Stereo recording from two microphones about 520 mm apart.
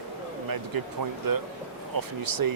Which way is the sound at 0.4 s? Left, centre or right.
Right.